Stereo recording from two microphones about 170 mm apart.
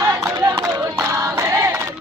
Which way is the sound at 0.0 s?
20° right (ahead or behind).